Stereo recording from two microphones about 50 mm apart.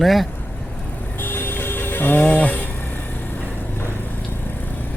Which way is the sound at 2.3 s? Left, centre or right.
Left.